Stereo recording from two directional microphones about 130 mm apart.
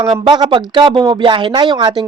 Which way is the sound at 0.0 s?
35° right (ahead or behind).